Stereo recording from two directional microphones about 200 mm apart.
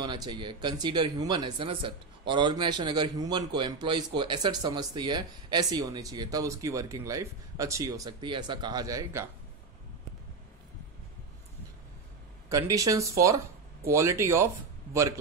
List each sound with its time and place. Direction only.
0.0 s speech: 20° right (ahead or behind)
12.4 s speech: 15° right (ahead or behind)